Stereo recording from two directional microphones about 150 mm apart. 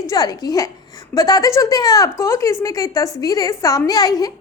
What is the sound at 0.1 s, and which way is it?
Speech, 25° left (ahead or behind).